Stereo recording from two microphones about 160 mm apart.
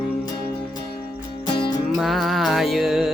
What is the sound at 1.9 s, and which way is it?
Music, centre (ahead or behind).